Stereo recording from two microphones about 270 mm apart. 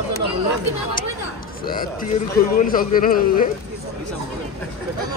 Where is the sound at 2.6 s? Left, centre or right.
Left.